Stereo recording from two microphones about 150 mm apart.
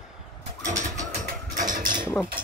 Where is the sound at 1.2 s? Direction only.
60° right (ahead or behind).